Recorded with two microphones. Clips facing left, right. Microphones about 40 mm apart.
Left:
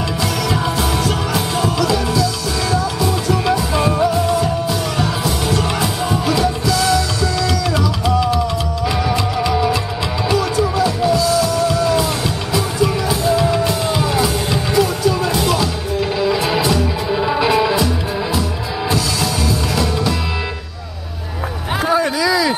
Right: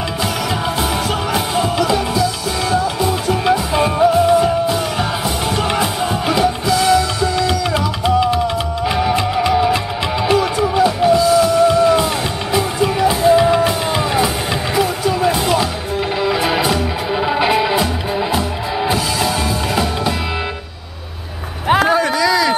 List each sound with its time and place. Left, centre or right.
0.2 s music: centre
18.9 s music: right
21.9 s a sound: centre